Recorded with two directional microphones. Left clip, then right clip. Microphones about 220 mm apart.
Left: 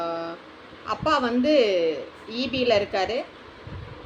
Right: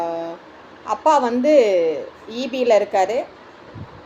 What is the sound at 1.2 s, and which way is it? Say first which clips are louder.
A woman's voice: right 6 dB; centre (ahead or behind).